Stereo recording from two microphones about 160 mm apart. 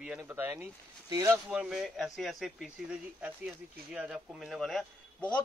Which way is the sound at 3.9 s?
5° right (ahead or behind).